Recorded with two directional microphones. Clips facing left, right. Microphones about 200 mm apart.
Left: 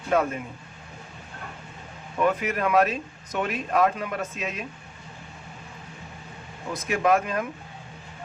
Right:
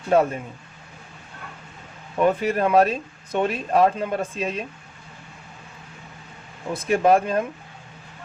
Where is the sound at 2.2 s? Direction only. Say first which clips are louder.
Right 4 dB; 30° right (ahead or behind).